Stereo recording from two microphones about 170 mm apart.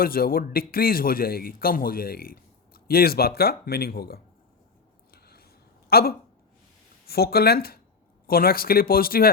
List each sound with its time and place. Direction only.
0.0 s a man's voice: 60° left (ahead or behind)
5.1 s a sound: 65° left (ahead or behind)
5.9 s a man's voice: 65° left (ahead or behind)